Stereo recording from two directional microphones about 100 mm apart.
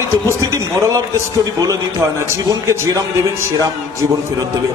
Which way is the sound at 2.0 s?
30° right (ahead or behind).